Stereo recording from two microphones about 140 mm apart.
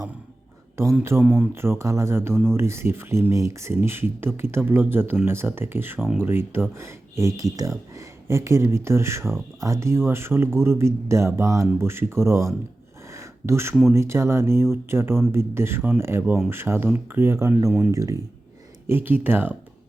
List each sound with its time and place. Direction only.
0.9 s speech: 15° right (ahead or behind)
1.2 s speech: 5° right (ahead or behind)
1.5 s speech: 15° right (ahead or behind)
2.3 s speech: 5° left (ahead or behind)
2.6 s speech: 20° right (ahead or behind)
13.1 s a sound: 20° right (ahead or behind)
13.9 s speech: 20° right (ahead or behind)
17.7 s speech: 10° right (ahead or behind)
17.9 s speech: 25° right (ahead or behind)